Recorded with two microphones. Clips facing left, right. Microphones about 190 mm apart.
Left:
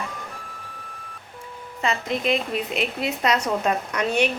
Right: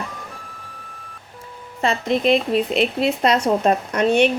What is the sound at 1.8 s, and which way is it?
A woman's voice, 35° right (ahead or behind).